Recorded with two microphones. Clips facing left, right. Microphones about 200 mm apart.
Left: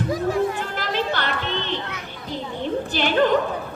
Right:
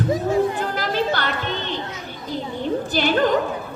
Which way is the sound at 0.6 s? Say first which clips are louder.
Right 3 dB; 40° right (ahead or behind).